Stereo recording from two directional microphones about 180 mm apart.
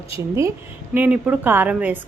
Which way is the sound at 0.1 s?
15° right (ahead or behind).